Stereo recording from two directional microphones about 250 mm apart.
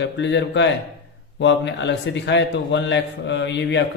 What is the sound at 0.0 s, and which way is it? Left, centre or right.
A man's voice, left.